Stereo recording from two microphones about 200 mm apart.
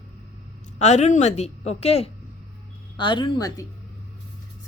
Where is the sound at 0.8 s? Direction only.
35° left (ahead or behind).